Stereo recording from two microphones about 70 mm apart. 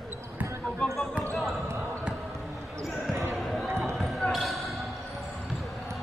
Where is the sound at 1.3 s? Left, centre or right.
Centre.